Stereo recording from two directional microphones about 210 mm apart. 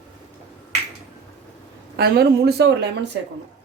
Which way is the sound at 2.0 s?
50° right (ahead or behind).